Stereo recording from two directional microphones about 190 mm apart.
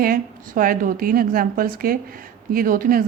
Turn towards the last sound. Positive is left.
turn(degrees=-50)  # may be behind; listen again after turning